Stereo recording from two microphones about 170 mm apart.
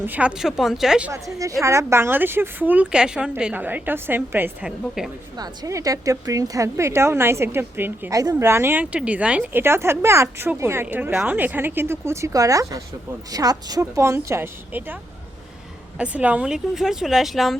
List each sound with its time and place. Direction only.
0.0 s speech: 10° right (ahead or behind)
1.1 s a woman's voice: 20° right (ahead or behind); by 5.1 s 5° right (ahead or behind)
5.4 s a woman's voice: 20° right (ahead or behind)
16.0 s speech: 10° right (ahead or behind)